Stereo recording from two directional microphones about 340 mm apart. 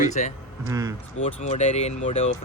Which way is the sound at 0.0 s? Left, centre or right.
Left.